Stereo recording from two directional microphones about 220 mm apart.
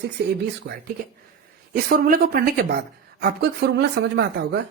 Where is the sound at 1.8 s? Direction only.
40° right (ahead or behind).